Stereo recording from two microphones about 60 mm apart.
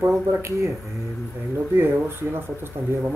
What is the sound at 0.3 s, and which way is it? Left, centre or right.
Speech, right.